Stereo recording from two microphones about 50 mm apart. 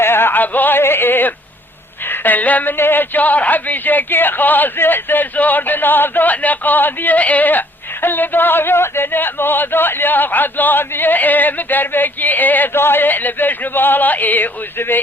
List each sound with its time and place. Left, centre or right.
0.0 s music: left
0.8 s a sound: left
2.0 s a woman's voice: left
2.7 s speech: left
12.7 s speech: left